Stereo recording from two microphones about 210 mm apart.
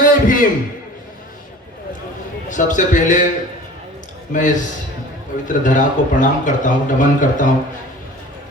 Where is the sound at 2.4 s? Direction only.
35° left (ahead or behind).